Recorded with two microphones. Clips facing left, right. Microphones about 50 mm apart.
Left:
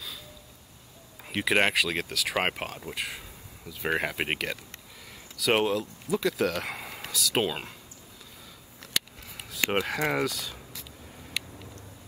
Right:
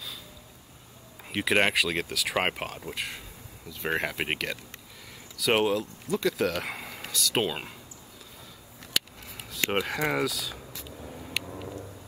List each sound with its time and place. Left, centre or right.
1.3 s speech: centre
9.4 s speech: centre
11.4 s vehicle: right